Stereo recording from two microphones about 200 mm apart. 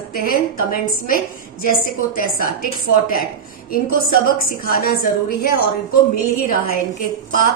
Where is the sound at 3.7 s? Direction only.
45° left (ahead or behind).